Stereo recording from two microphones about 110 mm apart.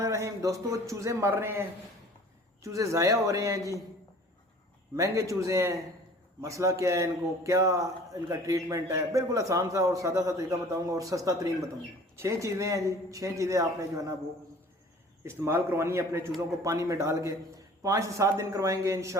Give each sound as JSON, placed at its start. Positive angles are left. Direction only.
{"t": 0.0, "sound": "a man's voice", "side_deg": -30}
{"t": 2.6, "sound": "a man's voice", "side_deg": -30}
{"t": 4.9, "sound": "a man's voice", "side_deg": -30}
{"t": 15.2, "sound": "a man's voice", "side_deg": -20}